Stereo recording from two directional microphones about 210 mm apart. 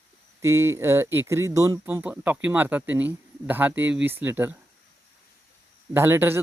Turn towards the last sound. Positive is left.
turn(degrees=-10)  # may be behind; listen again after turning